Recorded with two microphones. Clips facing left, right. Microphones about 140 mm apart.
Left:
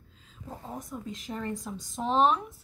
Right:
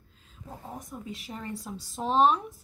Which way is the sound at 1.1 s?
10° right (ahead or behind).